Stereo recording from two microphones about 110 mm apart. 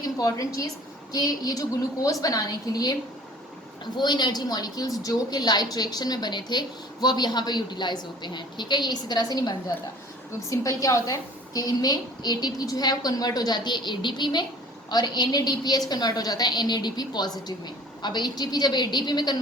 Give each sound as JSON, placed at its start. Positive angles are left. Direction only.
{"t": 0.0, "sound": "a woman's voice", "side_deg": 35}